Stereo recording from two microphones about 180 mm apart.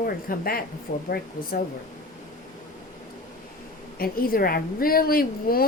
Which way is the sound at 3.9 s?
55° left (ahead or behind).